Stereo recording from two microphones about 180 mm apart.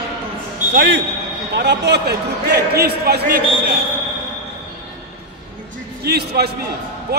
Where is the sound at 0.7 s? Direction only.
80° right; by 3.7 s 55° right (ahead or behind).